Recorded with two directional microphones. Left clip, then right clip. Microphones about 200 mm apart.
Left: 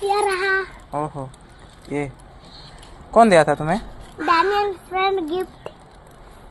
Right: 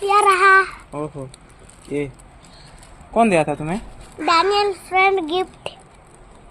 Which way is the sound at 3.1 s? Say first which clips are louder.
Left 4 dB; 5° left (ahead or behind).